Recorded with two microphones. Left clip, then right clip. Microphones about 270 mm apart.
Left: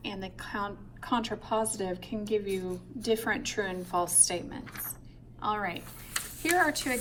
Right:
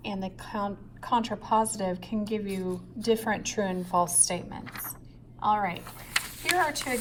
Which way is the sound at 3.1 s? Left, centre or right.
Right.